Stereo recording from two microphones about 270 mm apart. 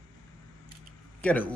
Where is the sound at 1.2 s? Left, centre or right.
Centre.